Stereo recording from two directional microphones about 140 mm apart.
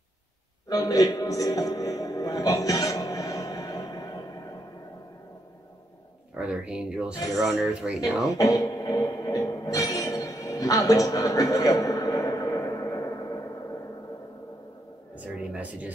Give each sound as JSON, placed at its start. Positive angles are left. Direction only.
{"t": 0.7, "sound": "speech", "side_deg": 25}
{"t": 6.3, "sound": "speech", "side_deg": -10}
{"t": 8.4, "sound": "music", "side_deg": 25}
{"t": 15.1, "sound": "speech", "side_deg": -10}